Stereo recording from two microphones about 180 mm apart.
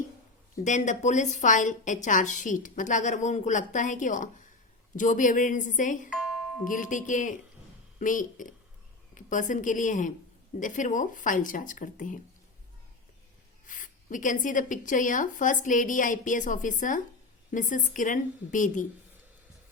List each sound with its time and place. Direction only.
0.5 s a woman's voice: 45° left (ahead or behind)
6.1 s doorbell: 5° right (ahead or behind)
6.7 s a woman's voice: 45° left (ahead or behind)
13.7 s a woman's voice: 45° left (ahead or behind)